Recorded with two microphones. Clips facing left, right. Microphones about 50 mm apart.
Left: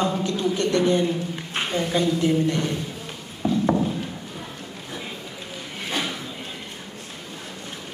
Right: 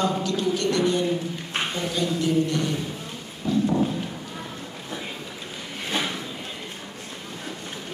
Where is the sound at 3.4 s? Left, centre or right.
Left.